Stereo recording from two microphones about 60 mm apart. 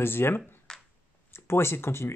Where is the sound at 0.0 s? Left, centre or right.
Left.